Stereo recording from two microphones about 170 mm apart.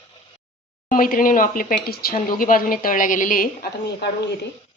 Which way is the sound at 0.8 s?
55° left (ahead or behind).